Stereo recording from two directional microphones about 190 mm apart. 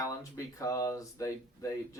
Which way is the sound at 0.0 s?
15° left (ahead or behind).